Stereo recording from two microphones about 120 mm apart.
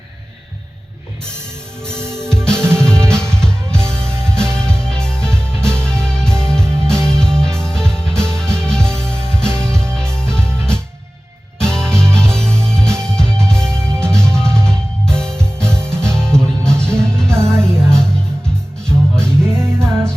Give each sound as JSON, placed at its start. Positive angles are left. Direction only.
{"t": 1.8, "sound": "music", "side_deg": 5}
{"t": 2.6, "sound": "music", "side_deg": -20}
{"t": 3.1, "sound": "music", "side_deg": 5}
{"t": 9.6, "sound": "music", "side_deg": -20}
{"t": 9.9, "sound": "music", "side_deg": 5}
{"t": 19.5, "sound": "music", "side_deg": -20}